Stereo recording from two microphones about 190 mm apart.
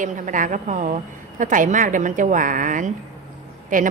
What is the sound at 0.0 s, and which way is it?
Speech, 40° right (ahead or behind).